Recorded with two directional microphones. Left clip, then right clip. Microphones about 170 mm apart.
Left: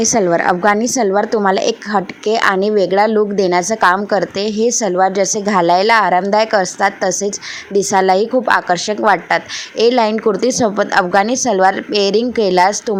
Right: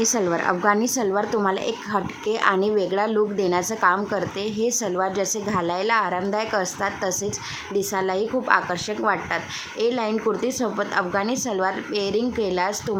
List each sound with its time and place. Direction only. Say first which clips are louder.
0.0 s a woman's voice: left 8 dB; 30° left (ahead or behind)